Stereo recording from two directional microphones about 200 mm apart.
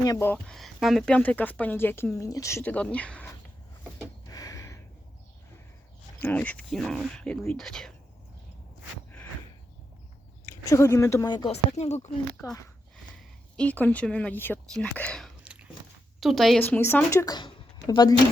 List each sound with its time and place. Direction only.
0.0 s speech: 15° left (ahead or behind)
4.3 s a sound: 15° left (ahead or behind)
6.1 s speech: 10° left (ahead or behind)
10.5 s speech: 15° left (ahead or behind)
11.8 s speech: 35° left (ahead or behind)
13.6 s speech: 10° left (ahead or behind)